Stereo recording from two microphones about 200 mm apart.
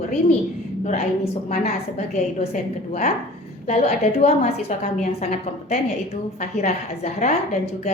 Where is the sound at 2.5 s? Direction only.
40° left (ahead or behind).